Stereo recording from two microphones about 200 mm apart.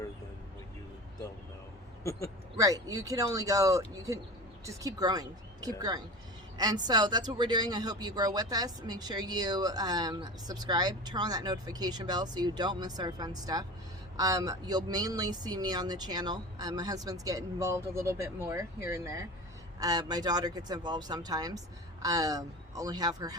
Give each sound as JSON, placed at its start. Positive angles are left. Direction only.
{"t": 2.6, "sound": "speech", "side_deg": -15}